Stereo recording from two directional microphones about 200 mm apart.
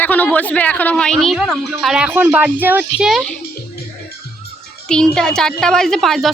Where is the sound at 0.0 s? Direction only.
10° left (ahead or behind).